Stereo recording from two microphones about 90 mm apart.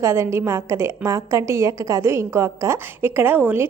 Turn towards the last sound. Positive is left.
turn(degrees=-20)  # may be behind; listen again after turning